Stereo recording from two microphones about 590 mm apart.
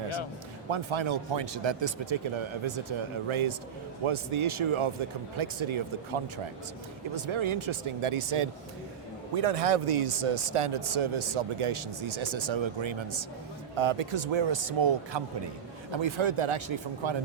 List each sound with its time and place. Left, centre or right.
0.7 s speech: right
9.3 s speech: right